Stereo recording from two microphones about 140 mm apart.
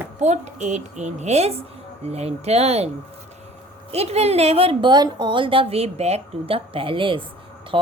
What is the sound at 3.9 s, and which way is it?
A woman's voice, 50° right (ahead or behind).